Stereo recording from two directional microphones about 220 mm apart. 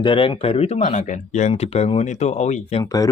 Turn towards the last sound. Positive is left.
turn(degrees=20)  # may be behind; listen again after turning